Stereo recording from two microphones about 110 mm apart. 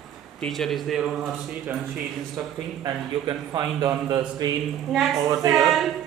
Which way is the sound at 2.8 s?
40° right (ahead or behind).